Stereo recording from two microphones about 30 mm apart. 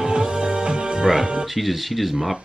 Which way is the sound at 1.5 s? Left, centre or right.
Centre.